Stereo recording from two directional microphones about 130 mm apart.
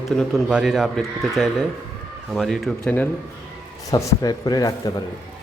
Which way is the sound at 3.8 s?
25° left (ahead or behind).